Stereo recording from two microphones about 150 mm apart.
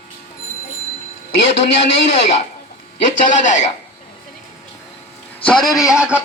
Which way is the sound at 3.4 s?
55° left (ahead or behind).